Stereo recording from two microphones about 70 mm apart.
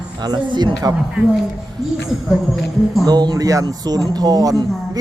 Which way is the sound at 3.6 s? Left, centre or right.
Right.